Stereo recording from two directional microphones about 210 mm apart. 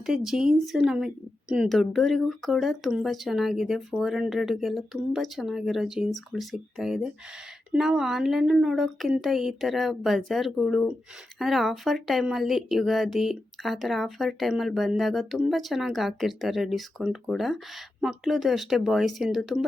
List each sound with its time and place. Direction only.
0.0 s speech: centre (ahead or behind)